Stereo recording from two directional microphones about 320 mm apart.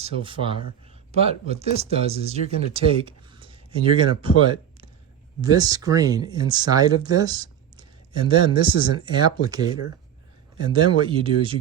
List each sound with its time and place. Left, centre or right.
0.0 s speech: centre